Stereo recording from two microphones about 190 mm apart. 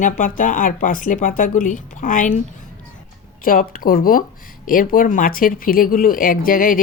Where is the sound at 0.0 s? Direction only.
45° left (ahead or behind).